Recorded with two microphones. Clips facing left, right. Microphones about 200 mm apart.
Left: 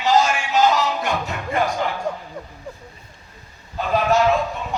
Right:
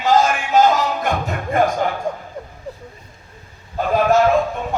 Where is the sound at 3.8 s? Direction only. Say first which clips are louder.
Right 3 dB; 50° right (ahead or behind).